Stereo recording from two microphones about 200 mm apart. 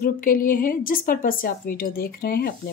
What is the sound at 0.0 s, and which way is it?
A woman's voice, 45° left (ahead or behind).